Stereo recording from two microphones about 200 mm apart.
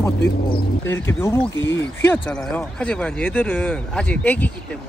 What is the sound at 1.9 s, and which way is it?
Speech, 5° left (ahead or behind).